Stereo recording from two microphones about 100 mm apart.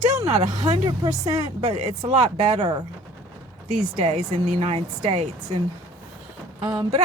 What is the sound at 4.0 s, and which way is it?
Speech, 75° right (ahead or behind).